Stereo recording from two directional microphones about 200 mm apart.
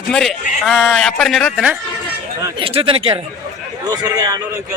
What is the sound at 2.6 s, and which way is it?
Speech, 25° right (ahead or behind).